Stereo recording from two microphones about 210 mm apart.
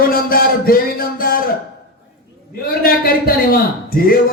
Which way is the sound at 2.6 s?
45° left (ahead or behind).